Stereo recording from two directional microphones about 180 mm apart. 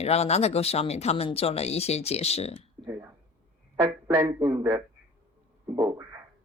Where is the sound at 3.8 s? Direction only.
15° right (ahead or behind).